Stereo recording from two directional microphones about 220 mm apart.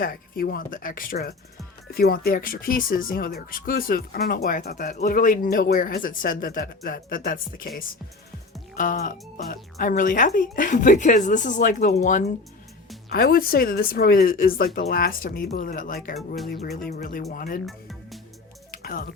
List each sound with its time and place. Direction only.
0.0 s speech: 40° left (ahead or behind)
8.7 s speech: 35° left (ahead or behind)
13.1 s speech: 45° left (ahead or behind)
16.1 s speech: centre (ahead or behind)
16.5 s speech: 45° left (ahead or behind)
17.7 s music: centre (ahead or behind)
18.7 s music: 40° left (ahead or behind)